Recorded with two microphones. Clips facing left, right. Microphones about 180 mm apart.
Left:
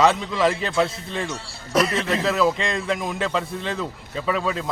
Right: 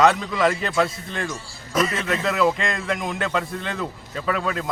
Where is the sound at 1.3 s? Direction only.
70° left (ahead or behind).